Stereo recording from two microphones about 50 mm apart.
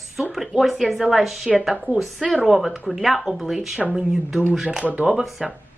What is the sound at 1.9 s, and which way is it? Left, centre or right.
Speech, left.